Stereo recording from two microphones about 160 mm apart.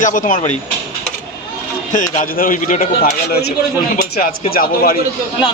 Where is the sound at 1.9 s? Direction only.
50° left (ahead or behind).